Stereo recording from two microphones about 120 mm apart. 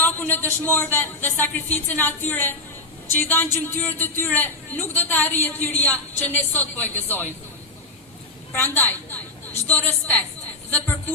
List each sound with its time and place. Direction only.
0.0 s a man's voice: 15° left (ahead or behind)
8.5 s a man's voice: 15° left (ahead or behind)